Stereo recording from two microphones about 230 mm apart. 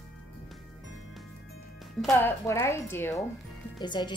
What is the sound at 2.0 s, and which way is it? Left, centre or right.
A woman's voice, centre.